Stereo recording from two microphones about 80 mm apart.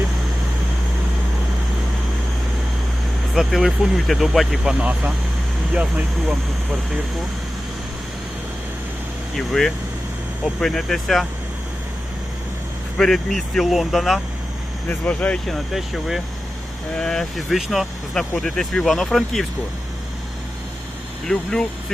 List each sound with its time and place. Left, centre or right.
3.3 s speech: centre
9.3 s speech: centre
13.0 s speech: centre
14.8 s speech: centre
15.4 s speech: centre
16.9 s speech: centre
21.2 s speech: centre